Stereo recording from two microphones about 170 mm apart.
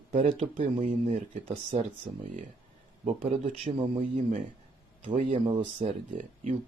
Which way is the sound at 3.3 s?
35° right (ahead or behind).